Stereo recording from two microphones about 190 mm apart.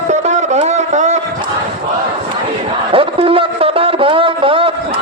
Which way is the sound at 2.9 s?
30° right (ahead or behind).